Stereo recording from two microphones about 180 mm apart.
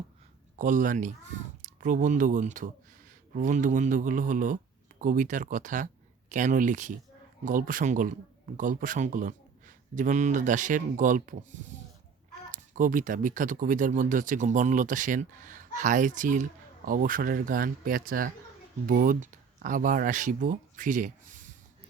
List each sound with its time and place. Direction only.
0.5 s speech: 45° right (ahead or behind)